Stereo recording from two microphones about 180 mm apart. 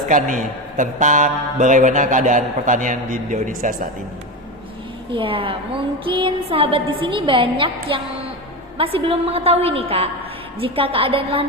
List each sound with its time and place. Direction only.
0.1 s a man's voice: 45° right (ahead or behind)
5.1 s a woman's voice: 30° right (ahead or behind)